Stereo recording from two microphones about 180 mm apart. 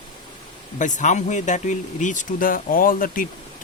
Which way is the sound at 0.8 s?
45° left (ahead or behind).